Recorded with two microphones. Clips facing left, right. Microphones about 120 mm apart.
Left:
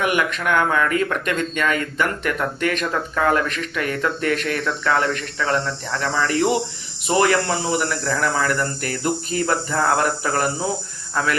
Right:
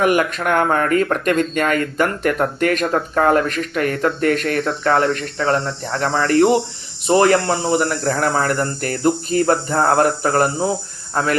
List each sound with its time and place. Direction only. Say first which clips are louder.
0.0 s speech: right 4 dB; 40° right (ahead or behind)
7.1 s speech: right 4 dB; 35° right (ahead or behind)